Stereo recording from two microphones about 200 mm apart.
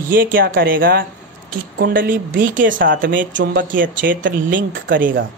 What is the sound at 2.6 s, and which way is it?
Speech, 70° right (ahead or behind).